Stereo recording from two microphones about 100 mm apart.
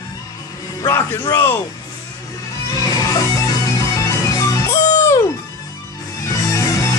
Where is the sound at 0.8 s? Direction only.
25° left (ahead or behind).